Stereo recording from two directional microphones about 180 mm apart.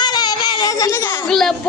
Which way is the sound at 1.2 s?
Centre (ahead or behind).